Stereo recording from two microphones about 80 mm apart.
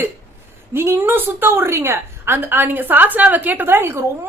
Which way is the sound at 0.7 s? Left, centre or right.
Right.